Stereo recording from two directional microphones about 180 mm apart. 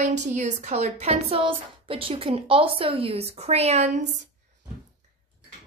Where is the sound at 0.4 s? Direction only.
40° right (ahead or behind).